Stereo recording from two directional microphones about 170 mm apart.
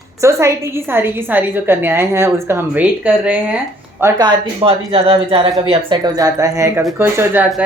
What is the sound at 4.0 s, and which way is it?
Speech, 20° right (ahead or behind).